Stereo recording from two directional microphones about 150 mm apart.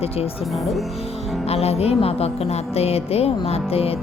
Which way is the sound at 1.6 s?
45° left (ahead or behind).